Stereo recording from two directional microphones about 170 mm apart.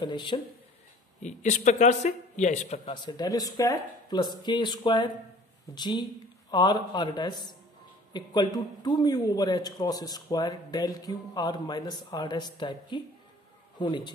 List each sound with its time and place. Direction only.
0.0 s a man's voice: 30° left (ahead or behind)
1.2 s a man's voice: 45° left (ahead or behind)
2.8 s a man's voice: 25° left (ahead or behind)